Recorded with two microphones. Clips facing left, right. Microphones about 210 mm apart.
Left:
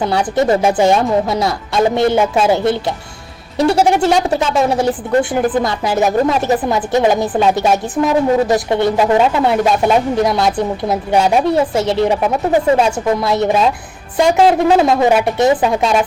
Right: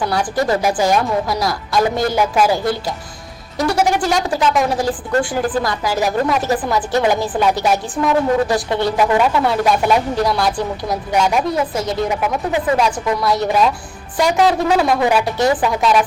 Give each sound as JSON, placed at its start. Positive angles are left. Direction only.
{"t": 0.0, "sound": "a woman's voice", "side_deg": 25}